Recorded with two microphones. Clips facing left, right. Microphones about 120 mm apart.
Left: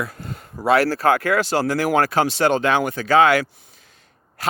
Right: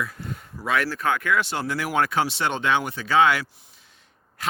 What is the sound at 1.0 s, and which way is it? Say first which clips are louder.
Speech: left 6 dB; 85° left.